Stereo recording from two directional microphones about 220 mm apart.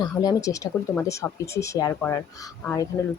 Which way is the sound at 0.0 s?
15° left (ahead or behind).